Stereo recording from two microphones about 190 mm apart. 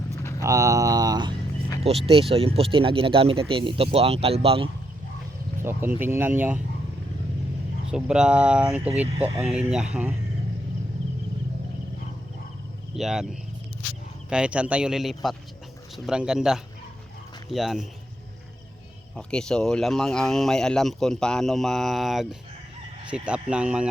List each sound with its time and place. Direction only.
0.2 s a sound: 15° left (ahead or behind)
0.4 s a sound: 15° right (ahead or behind)
1.8 s speech: 30° right (ahead or behind)
5.6 s speech: 10° right (ahead or behind)
7.9 s speech: 5° right (ahead or behind)
12.9 s speech: centre (ahead or behind)
14.3 s speech: 5° right (ahead or behind)
19.1 s speech: 5° left (ahead or behind)